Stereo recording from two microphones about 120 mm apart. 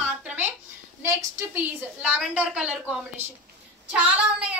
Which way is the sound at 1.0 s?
25° right (ahead or behind).